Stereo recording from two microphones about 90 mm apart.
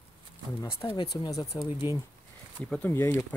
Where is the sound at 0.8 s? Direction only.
45° left (ahead or behind).